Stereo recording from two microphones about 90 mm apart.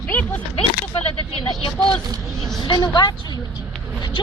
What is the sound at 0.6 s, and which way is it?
Speech, 90° left.